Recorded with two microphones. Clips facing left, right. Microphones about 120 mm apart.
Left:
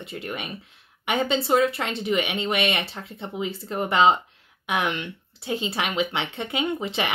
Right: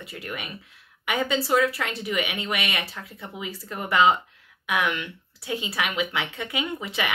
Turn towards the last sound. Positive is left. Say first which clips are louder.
# left 3 dB
turn(degrees=30)  # may be behind; listen again after turning